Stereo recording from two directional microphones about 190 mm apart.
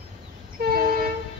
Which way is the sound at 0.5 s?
55° right (ahead or behind).